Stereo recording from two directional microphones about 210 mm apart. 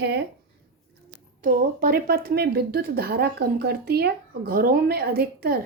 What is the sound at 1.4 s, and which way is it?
A woman's voice, 45° right (ahead or behind).